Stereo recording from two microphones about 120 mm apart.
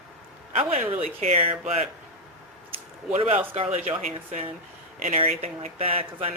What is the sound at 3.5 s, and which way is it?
Speech, 65° right (ahead or behind).